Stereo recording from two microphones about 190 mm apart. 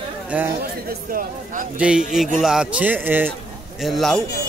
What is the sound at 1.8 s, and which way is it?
Speech, 5° right (ahead or behind).